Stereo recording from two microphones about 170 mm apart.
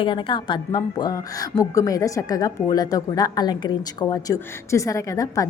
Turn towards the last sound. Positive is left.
turn(degrees=20)  # may be behind; listen again after turning